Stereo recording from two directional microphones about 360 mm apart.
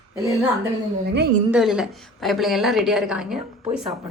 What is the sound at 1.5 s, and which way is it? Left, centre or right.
A woman's voice, centre.